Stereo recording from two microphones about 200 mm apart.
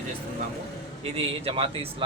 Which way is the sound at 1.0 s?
30° right (ahead or behind).